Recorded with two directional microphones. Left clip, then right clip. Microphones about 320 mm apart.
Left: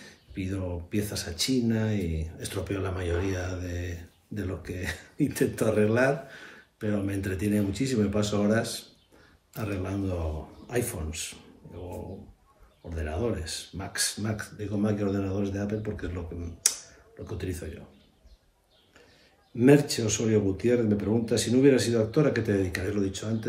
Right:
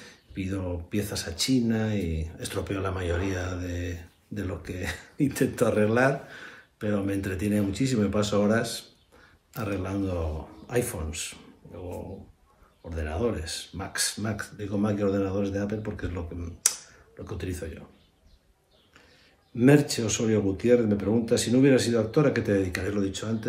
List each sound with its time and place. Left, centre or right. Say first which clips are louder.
0.0 s speech: right 1 dB; centre
12.9 s speech: right 2 dB; centre
19.5 s speech: even; centre